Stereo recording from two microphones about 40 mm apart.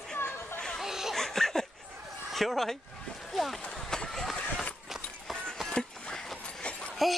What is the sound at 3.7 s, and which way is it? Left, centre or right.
Run, centre.